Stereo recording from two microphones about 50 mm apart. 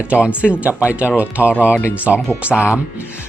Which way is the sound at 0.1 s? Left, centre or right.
Right.